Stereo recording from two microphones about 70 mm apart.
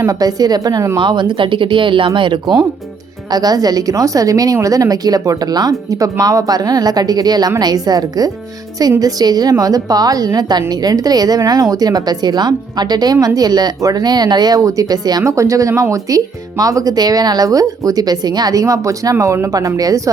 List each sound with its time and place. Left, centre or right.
0.1 s a woman's voice: right
0.9 s speech: right
3.3 s a woman's voice: right
13.2 s a woman's voice: right
14.6 s a woman's voice: right
15.2 s a woman's voice: right